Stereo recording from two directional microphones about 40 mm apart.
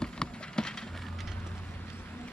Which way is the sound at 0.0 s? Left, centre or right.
Centre.